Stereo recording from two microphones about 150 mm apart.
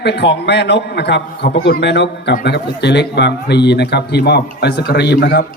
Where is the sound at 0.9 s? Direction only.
90° left.